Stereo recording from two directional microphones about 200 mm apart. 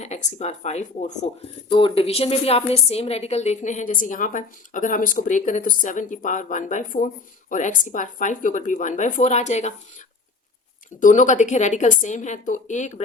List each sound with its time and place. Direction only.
0.0 s a woman's voice: 35° left (ahead or behind)
11.0 s a woman's voice: 40° left (ahead or behind)